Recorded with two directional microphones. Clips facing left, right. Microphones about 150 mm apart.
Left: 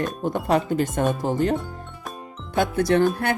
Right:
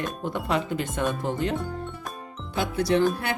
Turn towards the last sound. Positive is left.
turn(degrees=50)  # may be behind; listen again after turning